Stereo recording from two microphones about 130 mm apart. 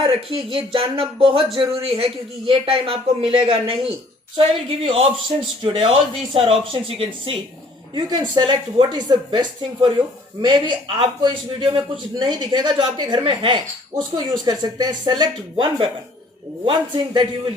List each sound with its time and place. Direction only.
0.0 s speech: 45° right (ahead or behind)
7.9 s speech: 35° right (ahead or behind)